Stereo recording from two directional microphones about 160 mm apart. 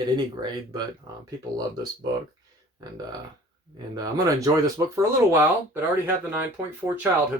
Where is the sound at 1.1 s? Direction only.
20° right (ahead or behind).